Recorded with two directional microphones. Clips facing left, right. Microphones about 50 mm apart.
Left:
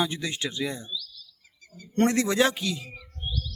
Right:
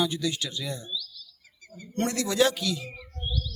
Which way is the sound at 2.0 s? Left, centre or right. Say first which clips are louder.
Left 2 dB; left.